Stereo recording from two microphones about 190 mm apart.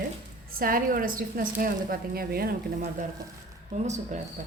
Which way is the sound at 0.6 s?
50° right (ahead or behind).